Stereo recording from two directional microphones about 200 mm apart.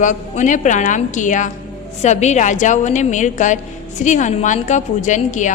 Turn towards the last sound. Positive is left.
turn(degrees=40)  # may be behind; listen again after turning